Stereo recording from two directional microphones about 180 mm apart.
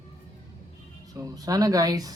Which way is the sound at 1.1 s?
20° right (ahead or behind).